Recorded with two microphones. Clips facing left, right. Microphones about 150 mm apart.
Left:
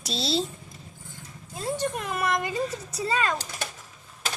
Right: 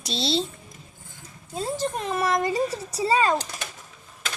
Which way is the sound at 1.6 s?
30° right (ahead or behind).